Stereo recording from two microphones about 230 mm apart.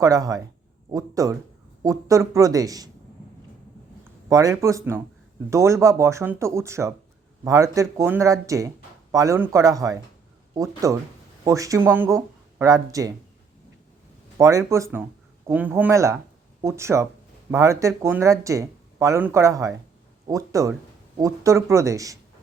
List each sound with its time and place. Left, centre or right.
0.0 s speech: centre
4.3 s speech: centre
14.3 s speech: centre